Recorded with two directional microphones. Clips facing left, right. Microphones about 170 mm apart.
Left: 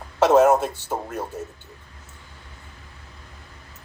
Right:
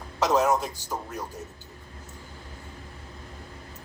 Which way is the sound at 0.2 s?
55° left (ahead or behind).